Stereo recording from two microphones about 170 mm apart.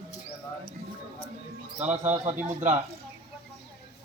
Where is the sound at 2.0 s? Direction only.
40° right (ahead or behind).